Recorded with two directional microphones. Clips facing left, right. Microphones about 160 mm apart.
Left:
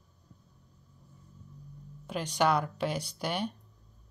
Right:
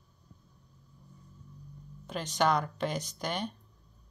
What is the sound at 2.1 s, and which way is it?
Speech, 10° left (ahead or behind).